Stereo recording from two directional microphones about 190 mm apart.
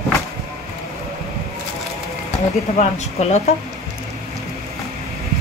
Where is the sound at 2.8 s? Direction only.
35° left (ahead or behind).